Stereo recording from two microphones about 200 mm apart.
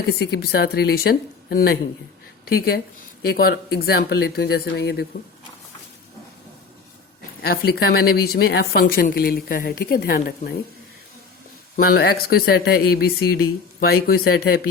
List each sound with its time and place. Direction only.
0.1 s speech: 55° left (ahead or behind)
7.4 s speech: 50° left (ahead or behind)
11.9 s speech: 50° left (ahead or behind)